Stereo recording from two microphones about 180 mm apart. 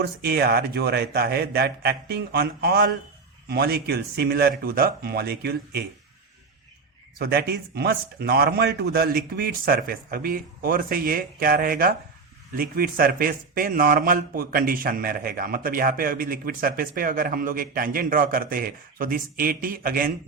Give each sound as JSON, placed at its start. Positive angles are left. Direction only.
{"t": 0.0, "sound": "a man's voice", "side_deg": -60}
{"t": 7.2, "sound": "a man's voice", "side_deg": -60}